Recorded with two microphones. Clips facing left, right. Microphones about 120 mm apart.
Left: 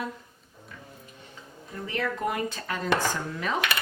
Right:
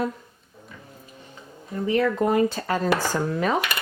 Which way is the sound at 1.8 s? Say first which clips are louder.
Right 8 dB; 25° right (ahead or behind).